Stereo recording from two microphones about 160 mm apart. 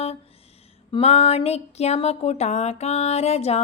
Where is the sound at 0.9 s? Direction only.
35° left (ahead or behind).